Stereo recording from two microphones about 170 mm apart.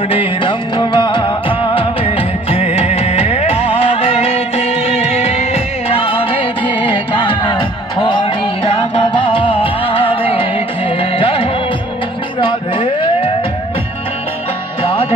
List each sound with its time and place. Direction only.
0.1 s music: 30° left (ahead or behind)
14.8 s music: 35° left (ahead or behind)